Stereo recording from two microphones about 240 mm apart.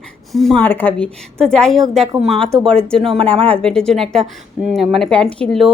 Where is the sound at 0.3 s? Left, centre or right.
Centre.